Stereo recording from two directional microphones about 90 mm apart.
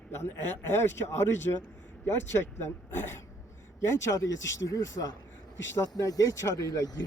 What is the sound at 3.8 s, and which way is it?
Speech, 40° left (ahead or behind).